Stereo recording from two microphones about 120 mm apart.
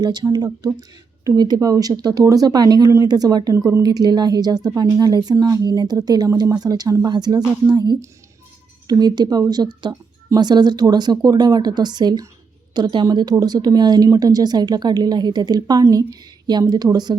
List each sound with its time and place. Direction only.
0.0 s speech: 35° right (ahead or behind)